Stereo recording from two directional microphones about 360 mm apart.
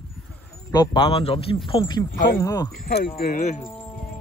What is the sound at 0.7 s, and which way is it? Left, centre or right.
Speech, centre.